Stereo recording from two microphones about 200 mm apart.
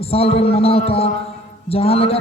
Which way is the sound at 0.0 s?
30° left (ahead or behind).